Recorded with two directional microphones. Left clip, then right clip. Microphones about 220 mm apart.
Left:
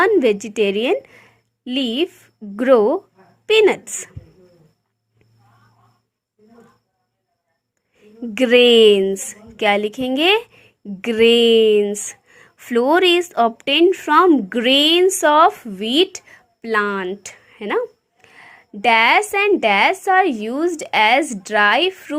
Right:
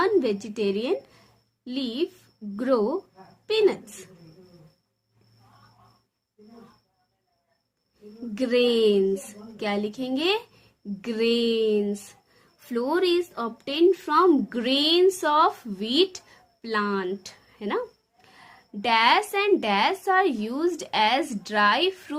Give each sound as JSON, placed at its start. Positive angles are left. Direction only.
{"t": 0.0, "sound": "a woman's voice", "side_deg": 35}
{"t": 8.4, "sound": "a woman's voice", "side_deg": 40}